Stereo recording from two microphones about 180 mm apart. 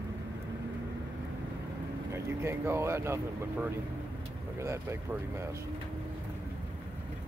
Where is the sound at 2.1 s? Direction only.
15° right (ahead or behind).